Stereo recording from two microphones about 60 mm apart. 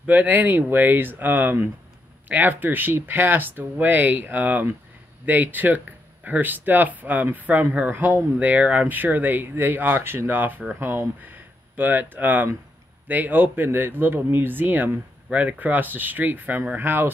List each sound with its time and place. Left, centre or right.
0.0 s speech: right